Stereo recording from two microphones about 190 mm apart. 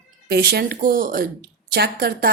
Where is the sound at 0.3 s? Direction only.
55° right (ahead or behind).